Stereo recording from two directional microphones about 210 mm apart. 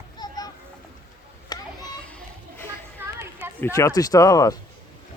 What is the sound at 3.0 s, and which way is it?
Music, 10° right (ahead or behind).